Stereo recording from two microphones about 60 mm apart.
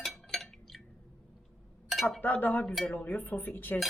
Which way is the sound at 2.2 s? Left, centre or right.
Left.